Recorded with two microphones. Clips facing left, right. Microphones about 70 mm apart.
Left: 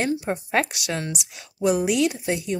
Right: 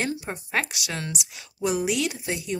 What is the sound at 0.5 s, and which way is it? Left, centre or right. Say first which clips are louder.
Speech: left 3 dB; left.